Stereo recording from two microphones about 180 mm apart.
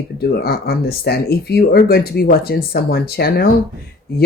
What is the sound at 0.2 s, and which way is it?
Speech, 60° left (ahead or behind).